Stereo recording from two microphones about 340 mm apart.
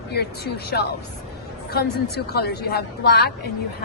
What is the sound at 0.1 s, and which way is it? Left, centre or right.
Speech, left.